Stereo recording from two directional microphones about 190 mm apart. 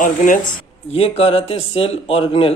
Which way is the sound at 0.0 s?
45° left (ahead or behind).